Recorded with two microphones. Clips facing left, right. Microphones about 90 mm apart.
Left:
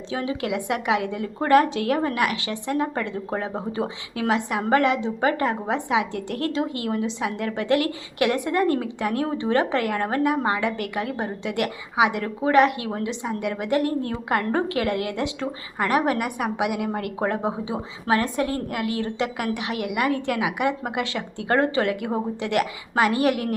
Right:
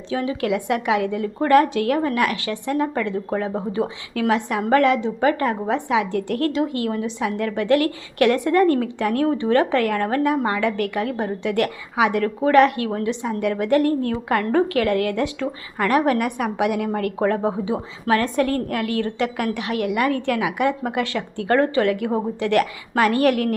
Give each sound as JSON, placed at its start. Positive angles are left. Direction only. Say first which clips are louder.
{"t": 0.1, "sound": "a woman's voice", "louder": "right 4 dB", "side_deg": 25}